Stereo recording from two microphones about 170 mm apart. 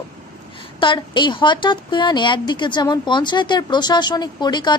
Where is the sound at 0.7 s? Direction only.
30° left (ahead or behind).